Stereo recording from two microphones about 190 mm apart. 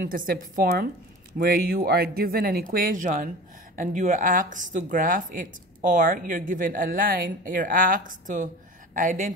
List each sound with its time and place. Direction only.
0.0 s speech: 45° right (ahead or behind)